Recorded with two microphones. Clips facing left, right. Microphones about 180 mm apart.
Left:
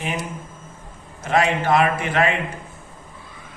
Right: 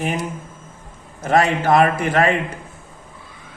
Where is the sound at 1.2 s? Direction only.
40° right (ahead or behind).